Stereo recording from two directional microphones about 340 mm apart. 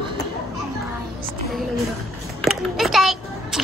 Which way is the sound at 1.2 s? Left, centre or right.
Centre.